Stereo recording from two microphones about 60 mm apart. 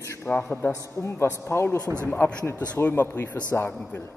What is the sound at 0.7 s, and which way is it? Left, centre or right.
A man's voice, left.